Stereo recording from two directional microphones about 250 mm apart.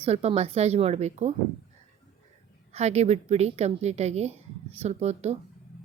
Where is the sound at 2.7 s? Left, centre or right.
Right.